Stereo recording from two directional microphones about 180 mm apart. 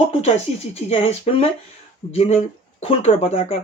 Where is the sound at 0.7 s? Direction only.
35° left (ahead or behind).